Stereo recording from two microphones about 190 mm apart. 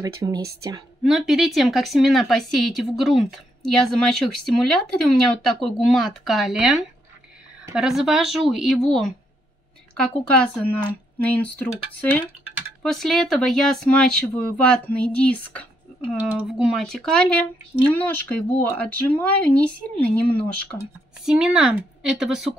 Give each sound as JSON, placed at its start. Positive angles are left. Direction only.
{"t": 0.0, "sound": "speech", "side_deg": -20}
{"t": 1.0, "sound": "speech", "side_deg": 0}